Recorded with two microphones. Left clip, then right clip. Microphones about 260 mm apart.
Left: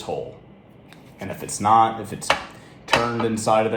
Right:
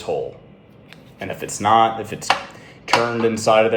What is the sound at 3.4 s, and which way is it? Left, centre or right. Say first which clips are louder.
Speech: right 4 dB; left.